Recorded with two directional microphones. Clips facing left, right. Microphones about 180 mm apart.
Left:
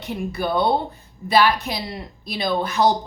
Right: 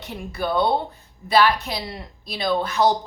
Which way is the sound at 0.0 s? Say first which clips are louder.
Left 3 dB; 15° left (ahead or behind).